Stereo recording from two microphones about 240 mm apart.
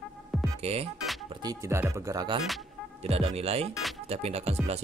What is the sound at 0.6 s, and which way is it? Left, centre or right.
Music, right.